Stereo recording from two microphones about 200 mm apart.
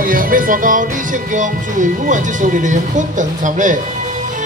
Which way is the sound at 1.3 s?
40° right (ahead or behind).